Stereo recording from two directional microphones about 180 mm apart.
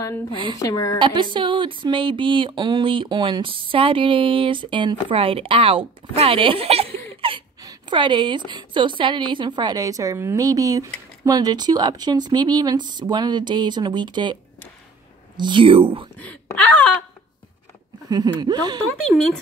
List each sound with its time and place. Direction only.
0.6 s a woman's voice: 20° left (ahead or behind)
0.9 s speech: 25° right (ahead or behind)
15.3 s speech: 25° right (ahead or behind)
16.2 s speech: 10° left (ahead or behind)
18.1 s speech: 25° right (ahead or behind)